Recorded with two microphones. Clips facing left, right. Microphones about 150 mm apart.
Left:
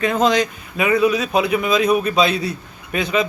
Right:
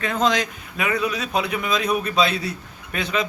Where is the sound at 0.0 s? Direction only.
15° left (ahead or behind).